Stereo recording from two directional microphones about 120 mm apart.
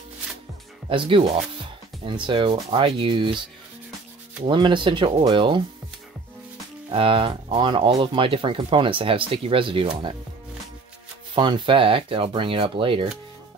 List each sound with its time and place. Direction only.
0.8 s speech: 45° right (ahead or behind)
4.5 s speech: 40° right (ahead or behind)
6.9 s speech: 50° right (ahead or behind)
11.3 s speech: 40° right (ahead or behind)